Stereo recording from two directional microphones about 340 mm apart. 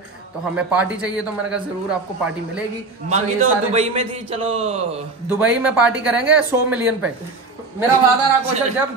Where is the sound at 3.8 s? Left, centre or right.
Centre.